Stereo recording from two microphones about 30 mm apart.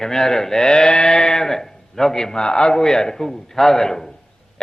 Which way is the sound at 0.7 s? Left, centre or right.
Left.